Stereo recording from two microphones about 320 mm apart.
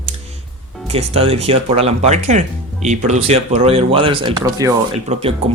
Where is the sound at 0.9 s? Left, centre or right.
Centre.